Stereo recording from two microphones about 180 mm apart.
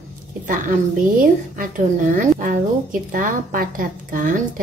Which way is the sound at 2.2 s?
50° right (ahead or behind).